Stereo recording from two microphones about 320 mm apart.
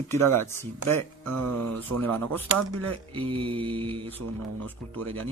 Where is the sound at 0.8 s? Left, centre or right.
Right.